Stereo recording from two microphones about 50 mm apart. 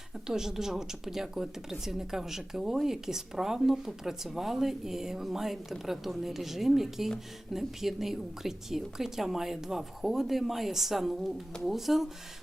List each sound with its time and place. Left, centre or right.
0.3 s a woman's voice: centre